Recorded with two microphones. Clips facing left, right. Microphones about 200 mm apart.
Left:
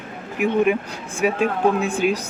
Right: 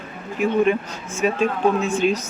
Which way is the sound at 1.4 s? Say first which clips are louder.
Even; 55° left (ahead or behind).